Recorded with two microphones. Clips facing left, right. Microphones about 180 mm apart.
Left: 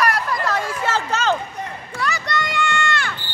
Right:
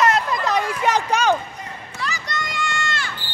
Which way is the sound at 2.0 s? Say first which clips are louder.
Left 5 dB; 65° left (ahead or behind).